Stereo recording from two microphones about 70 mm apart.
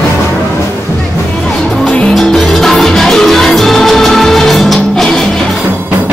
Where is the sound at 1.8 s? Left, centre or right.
Centre.